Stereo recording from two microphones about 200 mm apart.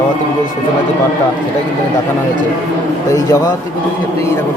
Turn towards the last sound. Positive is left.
turn(degrees=15)  # may be behind; listen again after turning